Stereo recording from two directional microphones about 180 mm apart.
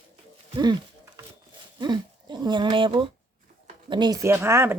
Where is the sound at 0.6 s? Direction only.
25° right (ahead or behind).